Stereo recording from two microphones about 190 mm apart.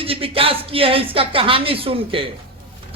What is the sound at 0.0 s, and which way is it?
A man's voice, 30° right (ahead or behind).